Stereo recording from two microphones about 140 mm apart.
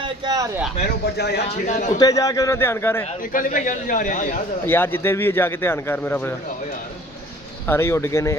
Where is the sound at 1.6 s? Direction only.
60° left (ahead or behind).